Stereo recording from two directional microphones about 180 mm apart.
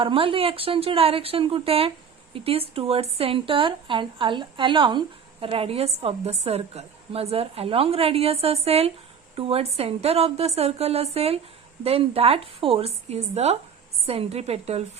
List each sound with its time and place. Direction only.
0.0 s a woman's voice: 30° right (ahead or behind)